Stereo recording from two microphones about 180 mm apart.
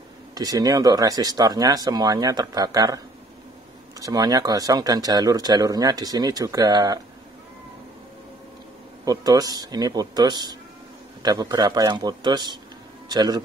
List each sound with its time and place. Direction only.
0.3 s speech: 20° right (ahead or behind)
4.0 s speech: 20° right (ahead or behind)
9.0 s speech: 20° right (ahead or behind)